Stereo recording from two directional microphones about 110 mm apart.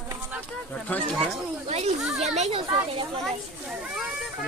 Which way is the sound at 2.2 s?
85° right.